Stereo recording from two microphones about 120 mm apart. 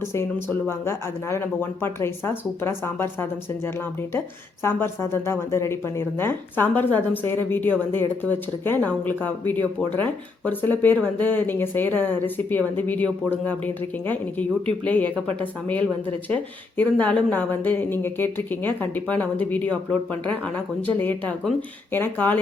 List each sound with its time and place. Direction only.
0.1 s speech: 20° left (ahead or behind)
4.6 s speech: 20° left (ahead or behind)